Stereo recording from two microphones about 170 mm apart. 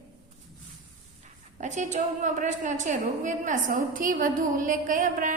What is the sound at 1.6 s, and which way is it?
A woman's voice, 45° right (ahead or behind).